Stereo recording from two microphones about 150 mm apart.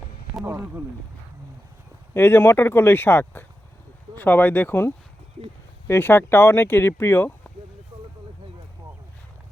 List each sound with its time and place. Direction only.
0.4 s speech: 15° right (ahead or behind)
2.1 s speech: 15° left (ahead or behind)